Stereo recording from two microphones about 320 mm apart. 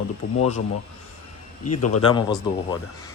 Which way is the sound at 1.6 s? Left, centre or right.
Left.